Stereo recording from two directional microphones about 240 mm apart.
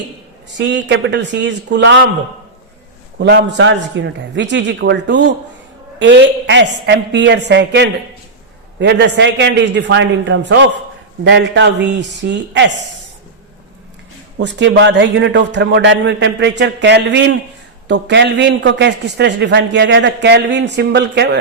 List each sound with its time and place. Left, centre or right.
0.5 s a man's voice: right
3.2 s a man's voice: right
14.4 s a man's voice: right